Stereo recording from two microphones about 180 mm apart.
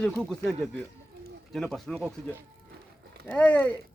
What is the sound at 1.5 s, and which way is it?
Speech, centre (ahead or behind).